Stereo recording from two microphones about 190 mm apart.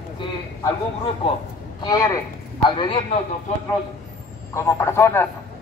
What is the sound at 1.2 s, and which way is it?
A man's voice, 30° left (ahead or behind).